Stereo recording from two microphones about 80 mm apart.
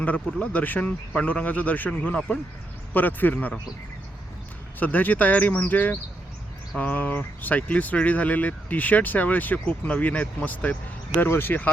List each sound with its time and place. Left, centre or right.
0.3 s speech: centre
4.8 s speech: left